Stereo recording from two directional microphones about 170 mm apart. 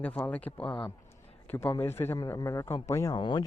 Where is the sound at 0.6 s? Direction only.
30° left (ahead or behind).